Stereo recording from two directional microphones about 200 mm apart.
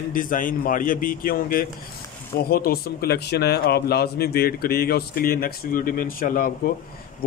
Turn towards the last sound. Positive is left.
turn(degrees=45)  # may be behind; listen again after turning